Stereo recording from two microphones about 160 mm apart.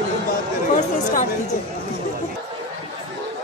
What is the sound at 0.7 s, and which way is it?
Speech, 50° left (ahead or behind).